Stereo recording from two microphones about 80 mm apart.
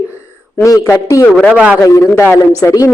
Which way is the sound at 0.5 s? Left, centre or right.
Left.